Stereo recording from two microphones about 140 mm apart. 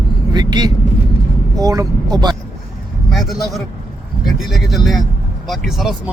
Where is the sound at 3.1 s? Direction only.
Centre (ahead or behind).